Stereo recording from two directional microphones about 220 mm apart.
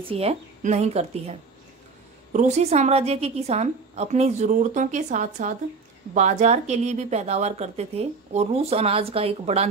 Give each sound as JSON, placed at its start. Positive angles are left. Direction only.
{"t": 0.0, "sound": "speech", "side_deg": -25}
{"t": 2.3, "sound": "a woman's voice", "side_deg": -30}